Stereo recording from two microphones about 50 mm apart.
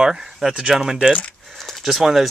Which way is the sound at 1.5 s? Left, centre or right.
Centre.